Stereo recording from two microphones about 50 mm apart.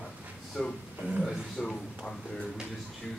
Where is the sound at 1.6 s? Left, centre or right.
Centre.